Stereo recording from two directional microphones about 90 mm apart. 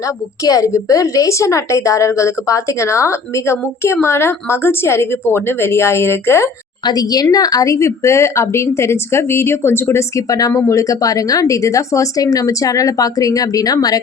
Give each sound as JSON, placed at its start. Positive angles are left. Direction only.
{"t": 0.4, "sound": "a woman's voice", "side_deg": 40}
{"t": 6.8, "sound": "a woman's voice", "side_deg": 45}
{"t": 10.2, "sound": "a woman's voice", "side_deg": 40}